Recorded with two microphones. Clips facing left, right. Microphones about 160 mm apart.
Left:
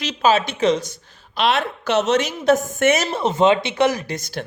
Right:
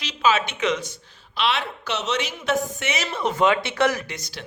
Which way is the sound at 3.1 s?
30° left (ahead or behind).